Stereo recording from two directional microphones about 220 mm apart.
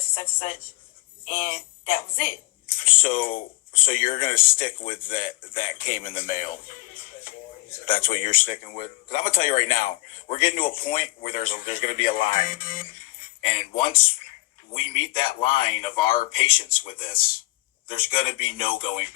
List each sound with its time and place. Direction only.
1.3 s speech: 40° left (ahead or behind)
3.2 s speech: 25° left (ahead or behind)
3.8 s speech: 40° left (ahead or behind)
4.6 s speech: 25° left (ahead or behind)
5.1 s speech: 40° left (ahead or behind)
7.7 s speech: 40° left (ahead or behind)
10.9 s speech: 35° left (ahead or behind)
13.4 s speech: 30° left (ahead or behind)
15.0 s speech: 40° left (ahead or behind)
17.8 s speech: 25° left (ahead or behind)